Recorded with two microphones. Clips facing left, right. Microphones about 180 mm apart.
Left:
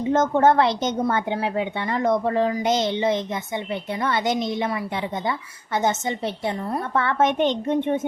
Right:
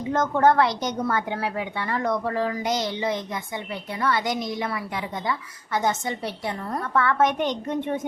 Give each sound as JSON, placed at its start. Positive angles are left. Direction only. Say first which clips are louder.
{"t": 0.1, "sound": "a woman's voice", "louder": "left 2 dB", "side_deg": 25}